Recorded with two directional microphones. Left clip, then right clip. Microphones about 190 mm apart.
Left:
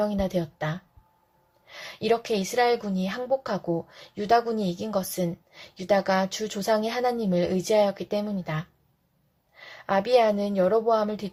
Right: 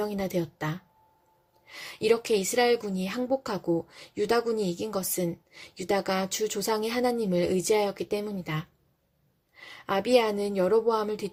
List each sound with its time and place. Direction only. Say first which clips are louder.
0.0 s a woman's voice: left 3 dB; 40° right (ahead or behind)